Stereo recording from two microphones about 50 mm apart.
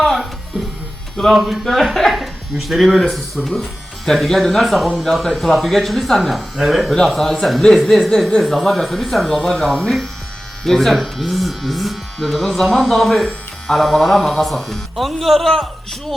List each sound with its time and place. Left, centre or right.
1.1 s speech: centre
9.3 s speech: centre
10.6 s speech: centre